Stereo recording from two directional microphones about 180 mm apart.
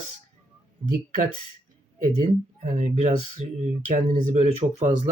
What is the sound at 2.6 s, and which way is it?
Speech, 40° right (ahead or behind).